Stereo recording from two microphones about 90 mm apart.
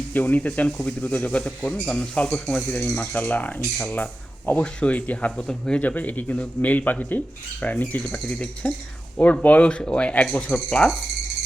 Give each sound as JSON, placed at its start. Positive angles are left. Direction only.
{"t": 0.1, "sound": "speech", "side_deg": 20}